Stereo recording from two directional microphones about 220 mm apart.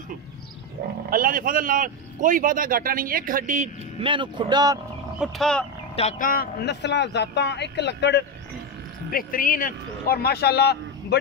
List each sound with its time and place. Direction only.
1.1 s a man's voice: 40° right (ahead or behind)
4.0 s speech: 20° right (ahead or behind)
5.2 s speech: 5° left (ahead or behind)
5.9 s a man's voice: 35° left (ahead or behind); by 8.3 s 50° left (ahead or behind)
9.1 s a man's voice: 40° left (ahead or behind)